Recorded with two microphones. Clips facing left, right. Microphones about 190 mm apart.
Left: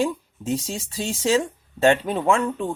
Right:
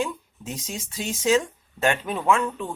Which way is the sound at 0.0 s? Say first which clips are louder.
Left 5 dB; 30° left (ahead or behind).